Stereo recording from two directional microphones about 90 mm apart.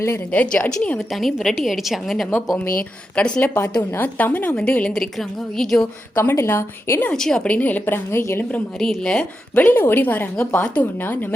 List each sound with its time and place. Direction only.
0.3 s a woman's voice: 10° left (ahead or behind)
0.9 s a woman's voice: centre (ahead or behind)
6.1 s a woman's voice: 30° left (ahead or behind)
7.1 s a woman's voice: 5° left (ahead or behind); by 8.6 s 25° left (ahead or behind)
8.8 s a woman's voice: 5° left (ahead or behind)
9.6 s a woman's voice: 20° left (ahead or behind)